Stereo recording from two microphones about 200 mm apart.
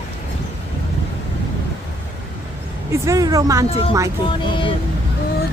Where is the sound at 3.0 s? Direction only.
15° right (ahead or behind).